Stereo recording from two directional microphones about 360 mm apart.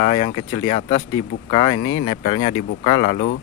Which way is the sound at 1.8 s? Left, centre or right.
Left.